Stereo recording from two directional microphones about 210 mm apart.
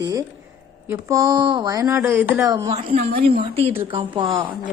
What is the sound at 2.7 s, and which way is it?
A woman's voice, 30° right (ahead or behind).